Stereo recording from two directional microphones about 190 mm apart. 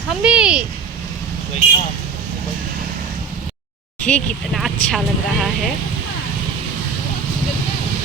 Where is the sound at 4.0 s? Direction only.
5° left (ahead or behind).